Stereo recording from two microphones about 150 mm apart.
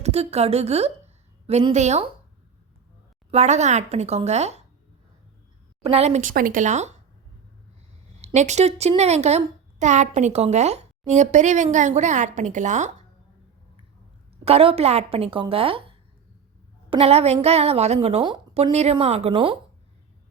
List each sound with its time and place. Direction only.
0.0 s a woman's voice: 45° right (ahead or behind)
3.3 s a woman's voice: 50° right (ahead or behind)
5.8 s a woman's voice: 45° right (ahead or behind)
6.2 s speech: 70° right (ahead or behind); by 6.9 s 50° right (ahead or behind)
8.2 s a woman's voice: 50° right (ahead or behind)
14.4 s a woman's voice: 40° right (ahead or behind)